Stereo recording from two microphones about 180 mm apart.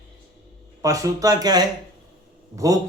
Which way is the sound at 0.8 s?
20° right (ahead or behind).